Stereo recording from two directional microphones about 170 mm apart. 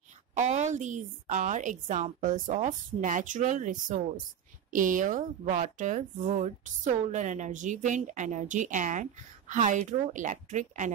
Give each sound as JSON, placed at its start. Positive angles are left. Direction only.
{"t": 0.3, "sound": "speech", "side_deg": -45}